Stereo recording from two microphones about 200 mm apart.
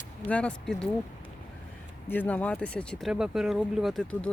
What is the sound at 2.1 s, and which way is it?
Speech, 10° left (ahead or behind).